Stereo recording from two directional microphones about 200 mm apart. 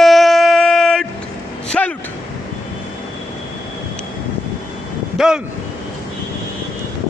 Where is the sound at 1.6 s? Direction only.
5° left (ahead or behind).